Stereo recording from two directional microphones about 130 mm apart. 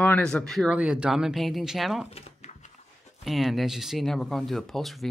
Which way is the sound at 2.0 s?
55° left (ahead or behind).